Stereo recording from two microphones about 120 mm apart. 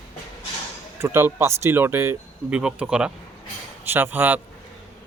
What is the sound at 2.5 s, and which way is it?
Speech, 10° right (ahead or behind).